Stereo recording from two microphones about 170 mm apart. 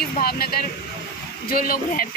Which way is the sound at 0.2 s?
65° left (ahead or behind).